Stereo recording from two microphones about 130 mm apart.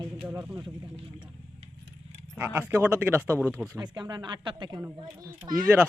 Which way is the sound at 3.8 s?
35° right (ahead or behind).